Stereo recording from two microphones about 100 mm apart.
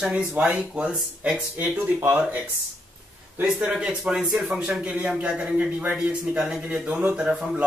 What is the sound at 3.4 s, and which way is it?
Speech, 5° right (ahead or behind).